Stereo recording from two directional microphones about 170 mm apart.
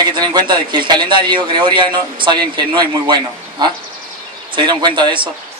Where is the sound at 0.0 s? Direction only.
25° right (ahead or behind).